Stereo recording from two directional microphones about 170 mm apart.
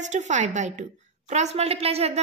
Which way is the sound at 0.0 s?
45° right (ahead or behind).